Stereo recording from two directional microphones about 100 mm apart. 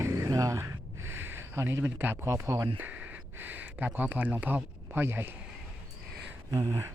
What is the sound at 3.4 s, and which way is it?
Speech, 20° right (ahead or behind).